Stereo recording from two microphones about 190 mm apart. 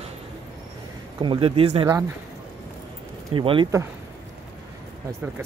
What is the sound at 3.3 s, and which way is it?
Speech, 25° right (ahead or behind).